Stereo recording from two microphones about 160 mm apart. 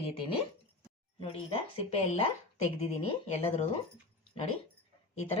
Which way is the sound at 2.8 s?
40° left (ahead or behind).